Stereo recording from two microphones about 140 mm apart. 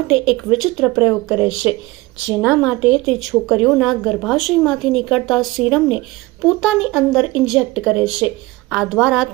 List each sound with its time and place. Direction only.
0.1 s a woman's voice: 5° right (ahead or behind)